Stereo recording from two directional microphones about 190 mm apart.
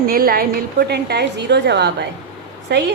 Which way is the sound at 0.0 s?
50° right (ahead or behind).